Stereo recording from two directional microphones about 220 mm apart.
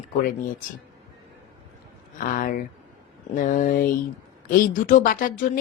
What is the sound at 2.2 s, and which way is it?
Speech, 40° left (ahead or behind).